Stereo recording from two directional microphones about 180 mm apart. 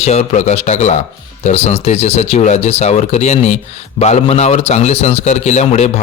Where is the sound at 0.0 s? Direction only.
35° left (ahead or behind).